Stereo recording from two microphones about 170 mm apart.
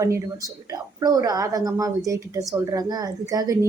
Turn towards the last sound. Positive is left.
turn(degrees=-20)  # may be behind; listen again after turning